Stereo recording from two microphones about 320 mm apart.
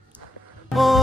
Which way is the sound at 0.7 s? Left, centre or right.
Centre.